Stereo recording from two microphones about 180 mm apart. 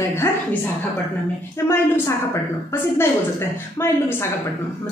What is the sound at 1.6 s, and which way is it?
A woman's voice, 15° left (ahead or behind).